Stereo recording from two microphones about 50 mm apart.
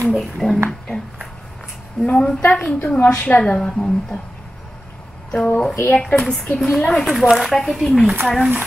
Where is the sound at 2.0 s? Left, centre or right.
Left.